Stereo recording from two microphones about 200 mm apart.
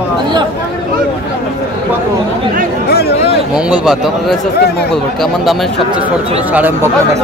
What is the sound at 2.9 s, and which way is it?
Speech, 50° left (ahead or behind).